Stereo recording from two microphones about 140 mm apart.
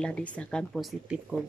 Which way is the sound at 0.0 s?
5° left (ahead or behind).